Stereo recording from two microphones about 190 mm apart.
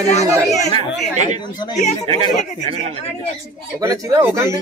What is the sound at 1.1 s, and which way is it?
Speech, 40° right (ahead or behind).